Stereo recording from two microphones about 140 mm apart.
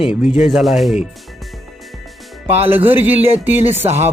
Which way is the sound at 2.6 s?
15° right (ahead or behind).